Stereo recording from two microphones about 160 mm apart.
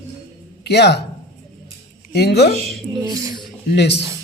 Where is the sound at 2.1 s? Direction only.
90° left.